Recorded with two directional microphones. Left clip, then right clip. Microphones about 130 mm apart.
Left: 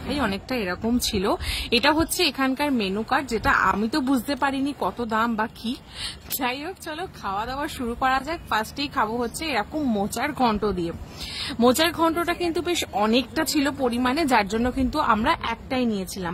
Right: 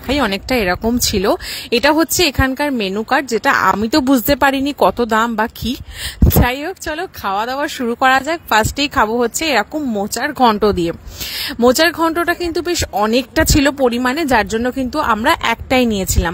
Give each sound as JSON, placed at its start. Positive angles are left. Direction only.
{"t": 0.1, "sound": "a woman's voice", "side_deg": -65}
{"t": 0.9, "sound": "speech", "side_deg": -55}
{"t": 9.8, "sound": "speech", "side_deg": -30}
{"t": 10.1, "sound": "speech", "side_deg": -45}
{"t": 10.6, "sound": "a woman's voice", "side_deg": -70}
{"t": 11.6, "sound": "speech", "side_deg": -45}
{"t": 13.3, "sound": "speech", "side_deg": -55}
{"t": 15.2, "sound": "a woman's voice", "side_deg": -65}